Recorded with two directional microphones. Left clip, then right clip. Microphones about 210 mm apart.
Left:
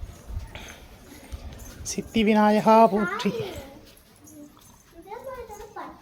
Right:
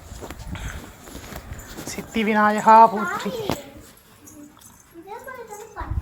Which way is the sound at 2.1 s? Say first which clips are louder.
Right 1 dB; 40° left (ahead or behind).